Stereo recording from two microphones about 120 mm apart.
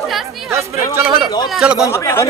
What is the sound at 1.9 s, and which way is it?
Speech, 25° left (ahead or behind).